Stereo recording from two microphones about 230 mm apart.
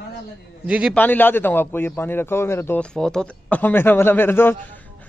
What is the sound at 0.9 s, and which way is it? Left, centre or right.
A man's voice, centre.